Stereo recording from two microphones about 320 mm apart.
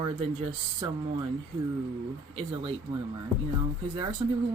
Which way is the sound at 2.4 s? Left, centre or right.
Centre.